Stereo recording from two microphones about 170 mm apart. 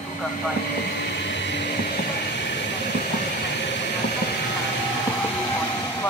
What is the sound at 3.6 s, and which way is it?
Train, 90° left.